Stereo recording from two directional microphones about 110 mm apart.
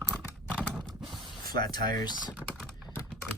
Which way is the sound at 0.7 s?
Centre (ahead or behind).